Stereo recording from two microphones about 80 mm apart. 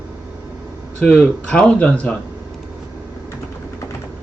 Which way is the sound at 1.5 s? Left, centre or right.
Centre.